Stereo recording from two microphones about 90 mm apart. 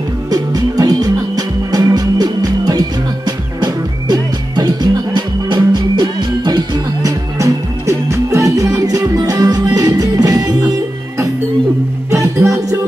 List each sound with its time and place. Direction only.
0.3 s music: 45° right (ahead or behind)
12.1 s music: 35° right (ahead or behind)